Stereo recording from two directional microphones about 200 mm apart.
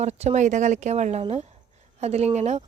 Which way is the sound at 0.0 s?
35° right (ahead or behind).